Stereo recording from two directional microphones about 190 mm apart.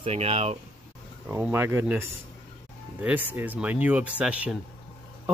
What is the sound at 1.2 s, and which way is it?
Speech, 10° right (ahead or behind).